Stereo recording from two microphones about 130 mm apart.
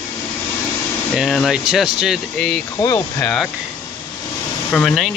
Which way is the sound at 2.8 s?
30° left (ahead or behind).